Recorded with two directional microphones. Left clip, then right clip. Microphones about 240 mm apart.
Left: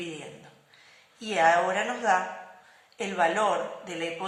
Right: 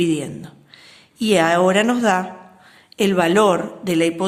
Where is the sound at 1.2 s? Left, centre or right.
Right.